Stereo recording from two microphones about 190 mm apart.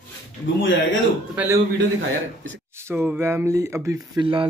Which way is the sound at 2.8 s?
10° right (ahead or behind).